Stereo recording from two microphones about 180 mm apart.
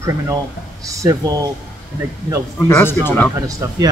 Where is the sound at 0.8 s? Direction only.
20° right (ahead or behind).